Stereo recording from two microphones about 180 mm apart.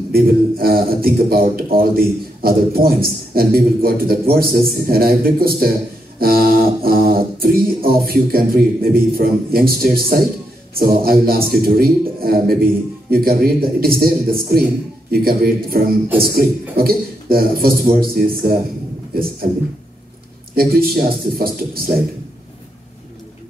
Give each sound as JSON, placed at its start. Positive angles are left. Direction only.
{"t": 0.1, "sound": "a man's voice", "side_deg": -55}
{"t": 20.5, "sound": "a man's voice", "side_deg": -55}